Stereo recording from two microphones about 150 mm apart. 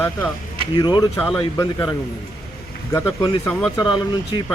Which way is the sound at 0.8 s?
25° left (ahead or behind).